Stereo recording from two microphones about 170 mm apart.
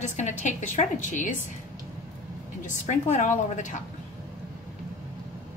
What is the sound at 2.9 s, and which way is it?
Speech, 45° left (ahead or behind).